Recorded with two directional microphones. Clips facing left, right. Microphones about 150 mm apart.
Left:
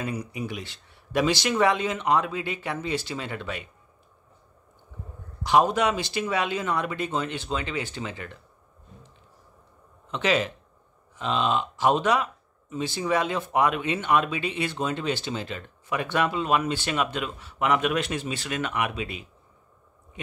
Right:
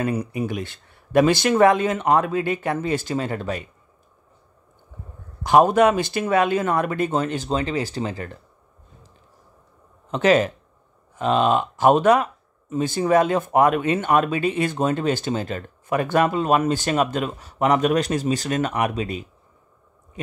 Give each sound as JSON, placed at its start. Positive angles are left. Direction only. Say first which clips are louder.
{"t": 0.0, "sound": "speech", "louder": "right 7 dB", "side_deg": -55}
{"t": 5.4, "sound": "speech", "louder": "right 6 dB", "side_deg": -50}
{"t": 10.1, "sound": "speech", "louder": "right 7 dB", "side_deg": -45}